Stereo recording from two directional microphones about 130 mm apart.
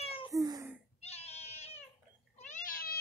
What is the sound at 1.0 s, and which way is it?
Cat, 55° left (ahead or behind).